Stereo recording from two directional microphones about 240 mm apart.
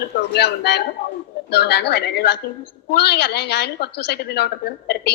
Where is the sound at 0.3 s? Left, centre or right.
Left.